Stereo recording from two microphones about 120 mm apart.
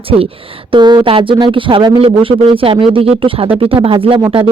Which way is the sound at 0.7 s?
40° right (ahead or behind).